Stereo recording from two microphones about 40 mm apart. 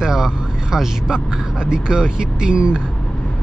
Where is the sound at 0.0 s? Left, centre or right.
Centre.